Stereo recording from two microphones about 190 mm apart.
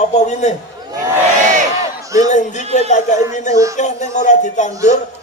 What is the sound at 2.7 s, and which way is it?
A man's voice, 40° left (ahead or behind).